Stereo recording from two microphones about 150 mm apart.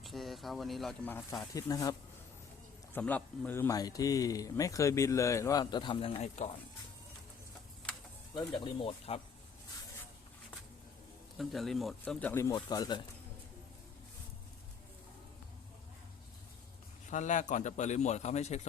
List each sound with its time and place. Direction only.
0.0 s speech: centre (ahead or behind)
1.3 s speech: 25° left (ahead or behind)
2.9 s speech: 10° left (ahead or behind); by 6.5 s 45° left (ahead or behind)
7.9 s a sound: 5° left (ahead or behind)
8.4 s speech: 35° left (ahead or behind)
11.3 s speech: centre (ahead or behind)
12.0 s speech: 15° left (ahead or behind)
12.5 s speech: 30° left (ahead or behind)
17.1 s a man's voice: 55° left (ahead or behind)